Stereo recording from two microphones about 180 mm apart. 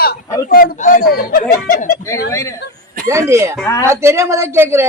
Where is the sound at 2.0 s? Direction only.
15° left (ahead or behind).